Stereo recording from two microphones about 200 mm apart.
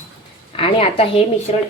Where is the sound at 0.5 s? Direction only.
30° left (ahead or behind).